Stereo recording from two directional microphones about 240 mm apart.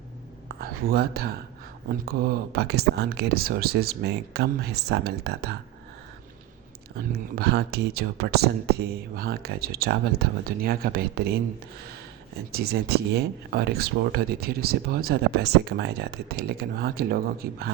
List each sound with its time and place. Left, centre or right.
0.4 s speech: right
6.9 s speech: right
12.5 s speech: right